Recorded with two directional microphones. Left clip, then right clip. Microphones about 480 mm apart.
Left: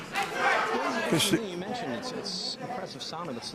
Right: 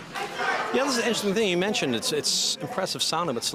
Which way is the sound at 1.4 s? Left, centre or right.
Right.